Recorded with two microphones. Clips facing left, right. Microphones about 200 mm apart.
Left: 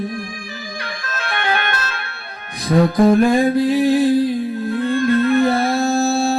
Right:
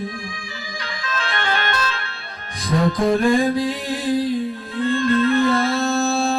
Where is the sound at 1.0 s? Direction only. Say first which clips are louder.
Even; 60° left (ahead or behind).